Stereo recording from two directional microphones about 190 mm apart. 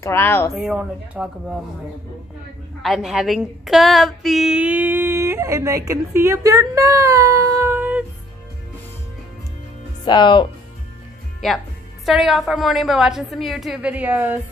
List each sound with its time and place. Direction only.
0.0 s speech: 10° left (ahead or behind)
0.5 s a woman's voice: centre (ahead or behind)
2.8 s a woman's voice: centre (ahead or behind)
10.0 s speech: 25° left (ahead or behind)
11.4 s a woman's voice: centre (ahead or behind)